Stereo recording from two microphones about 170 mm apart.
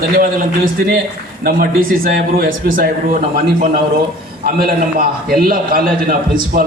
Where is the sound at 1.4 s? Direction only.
60° right (ahead or behind).